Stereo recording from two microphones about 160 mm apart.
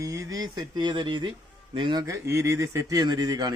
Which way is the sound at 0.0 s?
20° right (ahead or behind).